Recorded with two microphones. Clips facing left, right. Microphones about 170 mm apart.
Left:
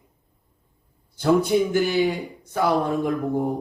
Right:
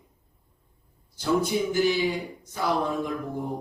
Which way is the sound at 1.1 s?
60° left (ahead or behind).